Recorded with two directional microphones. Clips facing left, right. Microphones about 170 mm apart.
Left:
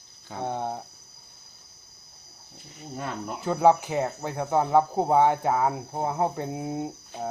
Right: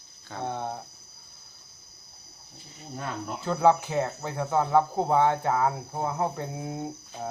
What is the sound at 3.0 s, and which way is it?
Speech, 15° left (ahead or behind).